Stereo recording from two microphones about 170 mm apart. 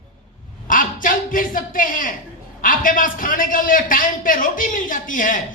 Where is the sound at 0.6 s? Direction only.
55° left (ahead or behind).